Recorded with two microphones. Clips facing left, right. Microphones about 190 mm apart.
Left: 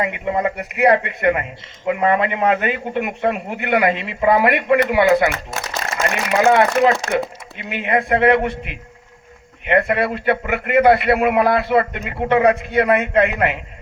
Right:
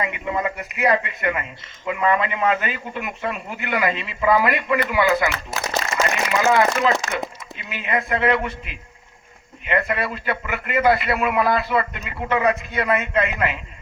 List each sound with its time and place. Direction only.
0.0 s a man's voice: 55° left (ahead or behind)
6.7 s speech: 40° left (ahead or behind)
7.7 s a man's voice: 60° left (ahead or behind)